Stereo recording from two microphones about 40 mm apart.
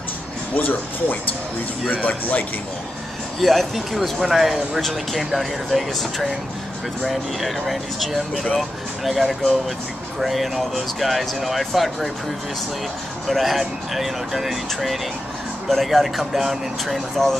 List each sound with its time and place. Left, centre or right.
0.6 s speech: left
3.3 s speech: centre
4.6 s speech: centre
10.2 s speech: centre
13.3 s speech: centre